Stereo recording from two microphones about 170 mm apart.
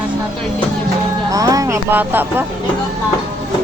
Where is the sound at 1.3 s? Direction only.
20° right (ahead or behind).